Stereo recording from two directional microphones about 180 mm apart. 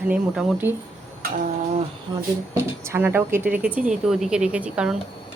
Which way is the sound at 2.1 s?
15° right (ahead or behind).